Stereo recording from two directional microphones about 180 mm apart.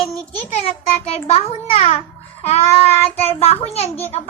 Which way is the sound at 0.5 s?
35° left (ahead or behind).